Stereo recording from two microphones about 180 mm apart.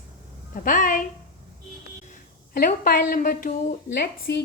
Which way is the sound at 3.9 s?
65° left (ahead or behind).